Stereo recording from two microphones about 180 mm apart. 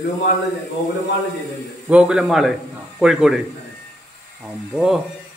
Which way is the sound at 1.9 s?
5° right (ahead or behind).